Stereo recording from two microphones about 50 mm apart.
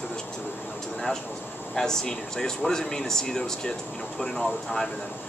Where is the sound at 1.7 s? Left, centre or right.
Centre.